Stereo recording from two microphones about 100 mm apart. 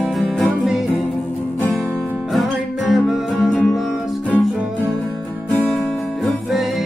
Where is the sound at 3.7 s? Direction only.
Centre (ahead or behind).